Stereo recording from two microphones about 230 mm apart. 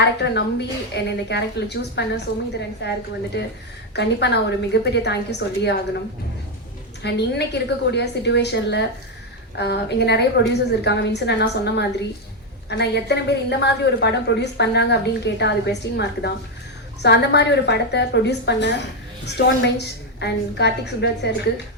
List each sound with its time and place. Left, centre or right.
0.0 s a woman's voice: left
3.9 s a woman's voice: left
7.0 s a woman's voice: left